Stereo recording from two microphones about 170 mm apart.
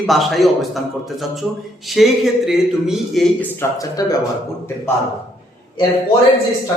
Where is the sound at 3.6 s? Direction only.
20° left (ahead or behind).